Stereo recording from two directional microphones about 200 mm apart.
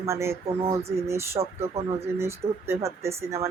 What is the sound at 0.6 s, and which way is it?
Speech, 30° right (ahead or behind).